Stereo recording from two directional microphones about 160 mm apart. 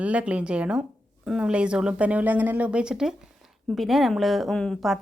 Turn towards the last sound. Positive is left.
turn(degrees=0)  # may be behind; listen again after turning